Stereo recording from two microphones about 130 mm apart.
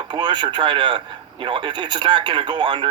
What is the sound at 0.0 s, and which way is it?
A man's voice, 35° right (ahead or behind).